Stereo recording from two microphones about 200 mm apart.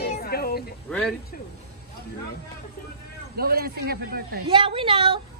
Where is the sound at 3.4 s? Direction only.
50° right (ahead or behind).